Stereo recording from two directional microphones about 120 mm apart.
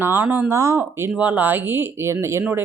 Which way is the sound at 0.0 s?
15° right (ahead or behind).